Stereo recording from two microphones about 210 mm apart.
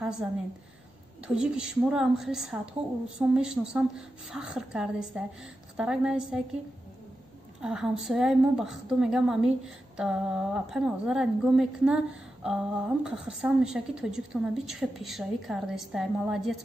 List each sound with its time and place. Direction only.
0.0 s a woman's voice: 5° right (ahead or behind)
7.6 s a woman's voice: centre (ahead or behind)